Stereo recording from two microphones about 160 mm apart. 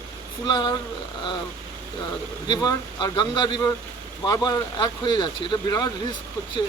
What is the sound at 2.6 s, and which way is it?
Speech, 25° left (ahead or behind).